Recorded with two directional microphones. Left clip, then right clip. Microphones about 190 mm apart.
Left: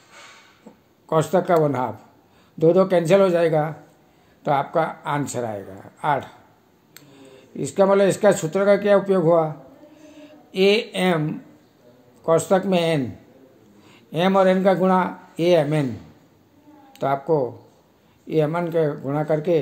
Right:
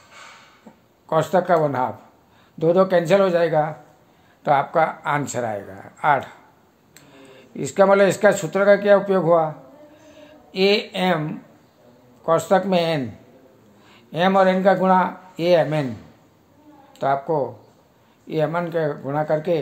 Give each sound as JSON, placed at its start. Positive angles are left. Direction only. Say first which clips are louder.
{"t": 1.0, "sound": "speech", "louder": "right 1 dB", "side_deg": 25}
{"t": 4.4, "sound": "a woman's voice", "louder": "right 3 dB", "side_deg": 15}
{"t": 12.3, "sound": "speech", "louder": "right 1 dB", "side_deg": 25}
{"t": 17.0, "sound": "speech", "louder": "even", "side_deg": 25}